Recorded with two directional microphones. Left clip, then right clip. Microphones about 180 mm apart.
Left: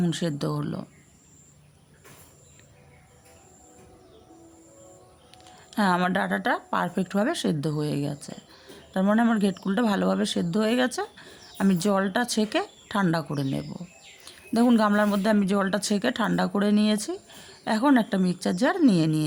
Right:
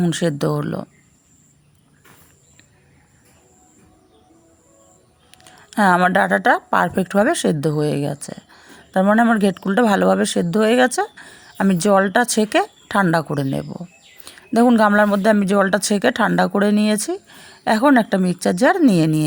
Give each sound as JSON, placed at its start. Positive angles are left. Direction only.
{"t": 0.0, "sound": "speech", "side_deg": -35}
{"t": 5.3, "sound": "speech", "side_deg": -35}